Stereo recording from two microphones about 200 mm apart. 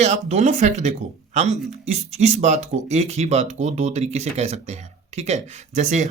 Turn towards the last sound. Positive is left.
turn(degrees=-35)  # may be behind; listen again after turning